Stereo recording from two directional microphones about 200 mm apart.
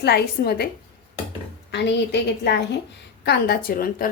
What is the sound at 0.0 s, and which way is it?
Speech, 55° left (ahead or behind).